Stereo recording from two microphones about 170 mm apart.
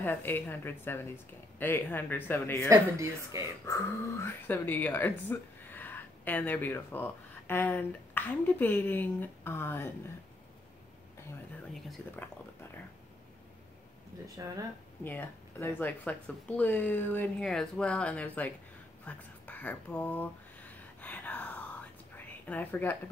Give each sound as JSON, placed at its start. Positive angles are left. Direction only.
{"t": 0.0, "sound": "speech", "side_deg": 10}
{"t": 2.7, "sound": "speech", "side_deg": -20}
{"t": 3.6, "sound": "speech", "side_deg": 15}
{"t": 14.2, "sound": "speech", "side_deg": -20}
{"t": 15.0, "sound": "speech", "side_deg": 10}
{"t": 19.0, "sound": "whispering", "side_deg": 10}
{"t": 22.1, "sound": "a sound", "side_deg": 10}